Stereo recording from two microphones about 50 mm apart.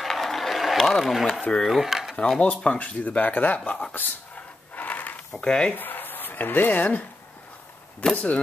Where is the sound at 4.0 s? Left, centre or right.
Left.